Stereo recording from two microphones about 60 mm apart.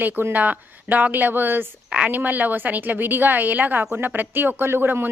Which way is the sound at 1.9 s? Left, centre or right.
Right.